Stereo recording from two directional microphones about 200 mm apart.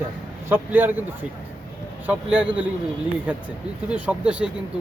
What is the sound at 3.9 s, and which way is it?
Speech, 5° right (ahead or behind).